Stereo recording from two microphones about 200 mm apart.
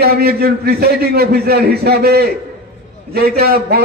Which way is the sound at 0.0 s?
50° right (ahead or behind).